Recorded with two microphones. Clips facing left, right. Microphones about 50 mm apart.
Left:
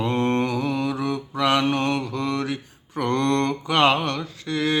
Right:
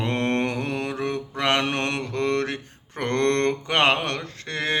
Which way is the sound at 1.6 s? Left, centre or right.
Right.